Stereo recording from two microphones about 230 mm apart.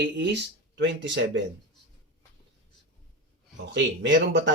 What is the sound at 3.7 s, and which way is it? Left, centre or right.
Speech, right.